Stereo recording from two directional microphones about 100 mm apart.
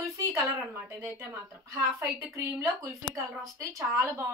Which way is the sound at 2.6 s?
35° right (ahead or behind).